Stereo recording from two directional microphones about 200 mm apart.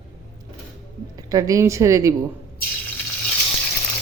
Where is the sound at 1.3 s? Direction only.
15° right (ahead or behind).